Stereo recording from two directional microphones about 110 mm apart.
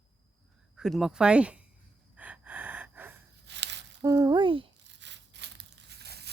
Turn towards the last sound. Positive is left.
turn(degrees=-55)  # may be behind; listen again after turning